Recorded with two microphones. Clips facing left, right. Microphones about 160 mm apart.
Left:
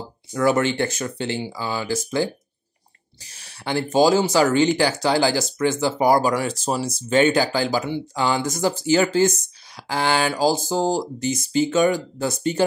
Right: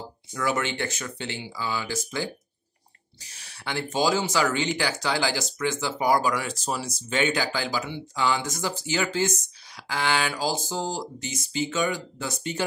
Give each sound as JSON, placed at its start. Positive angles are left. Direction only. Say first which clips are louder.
{"t": 0.3, "sound": "speech", "louder": "left 8 dB", "side_deg": 40}
{"t": 3.3, "sound": "speech", "louder": "left 7 dB", "side_deg": 35}